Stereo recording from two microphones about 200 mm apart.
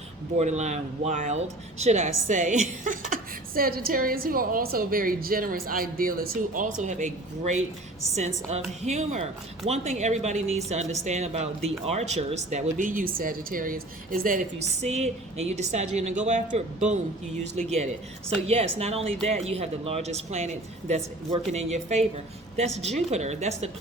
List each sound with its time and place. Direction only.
0.3 s speech: 35° right (ahead or behind)